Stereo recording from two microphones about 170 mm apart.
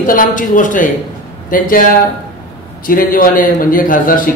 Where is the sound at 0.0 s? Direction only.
55° left (ahead or behind).